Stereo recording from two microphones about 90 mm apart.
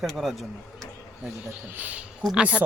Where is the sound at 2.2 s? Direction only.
10° right (ahead or behind).